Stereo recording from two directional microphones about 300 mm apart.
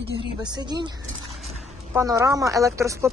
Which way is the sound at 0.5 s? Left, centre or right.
Centre.